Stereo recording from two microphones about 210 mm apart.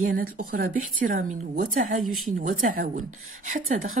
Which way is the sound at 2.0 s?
90° right.